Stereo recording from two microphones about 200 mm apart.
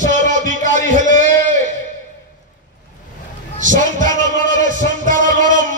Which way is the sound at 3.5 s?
40° right (ahead or behind).